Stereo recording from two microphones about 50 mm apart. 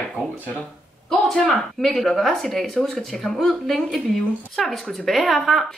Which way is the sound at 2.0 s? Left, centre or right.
Centre.